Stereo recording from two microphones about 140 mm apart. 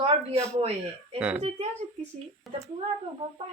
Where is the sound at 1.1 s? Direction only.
10° right (ahead or behind).